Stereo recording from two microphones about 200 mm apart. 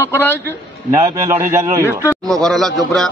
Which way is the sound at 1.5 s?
15° right (ahead or behind).